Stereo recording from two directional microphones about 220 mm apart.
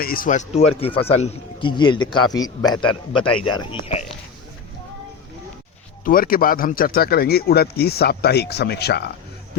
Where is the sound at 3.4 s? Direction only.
25° left (ahead or behind).